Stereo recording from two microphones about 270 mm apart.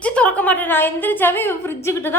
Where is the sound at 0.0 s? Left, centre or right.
Centre.